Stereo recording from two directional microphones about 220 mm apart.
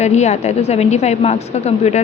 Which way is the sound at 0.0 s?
30° left (ahead or behind).